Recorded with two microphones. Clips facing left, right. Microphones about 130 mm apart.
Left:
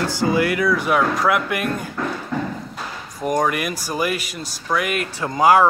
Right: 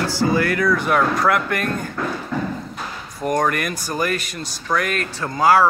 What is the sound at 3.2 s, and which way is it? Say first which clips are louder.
Speech: even; 5° left (ahead or behind).